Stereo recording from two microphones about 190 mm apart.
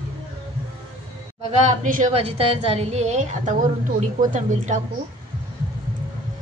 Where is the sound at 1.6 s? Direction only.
40° right (ahead or behind).